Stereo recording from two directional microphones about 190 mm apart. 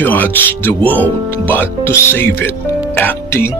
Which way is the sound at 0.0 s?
10° left (ahead or behind).